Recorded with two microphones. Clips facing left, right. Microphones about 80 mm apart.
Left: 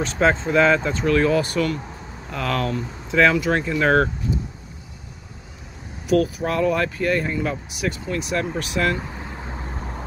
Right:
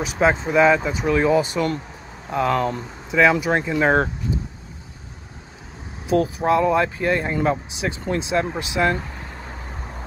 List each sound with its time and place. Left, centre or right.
0.0 s speech: centre
3.1 s speech: centre
6.0 s speech: right